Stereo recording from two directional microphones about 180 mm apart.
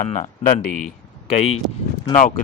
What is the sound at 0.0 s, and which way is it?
Speech, 40° left (ahead or behind).